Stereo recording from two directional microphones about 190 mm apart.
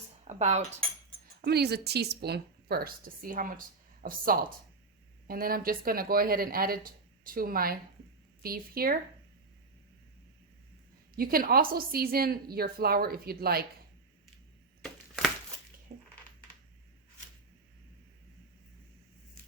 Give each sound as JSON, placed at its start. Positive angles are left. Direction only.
{"t": 0.3, "sound": "cutlery", "side_deg": -35}
{"t": 1.4, "sound": "speech", "side_deg": -55}
{"t": 11.2, "sound": "speech", "side_deg": -50}
{"t": 14.8, "sound": "a sound", "side_deg": 0}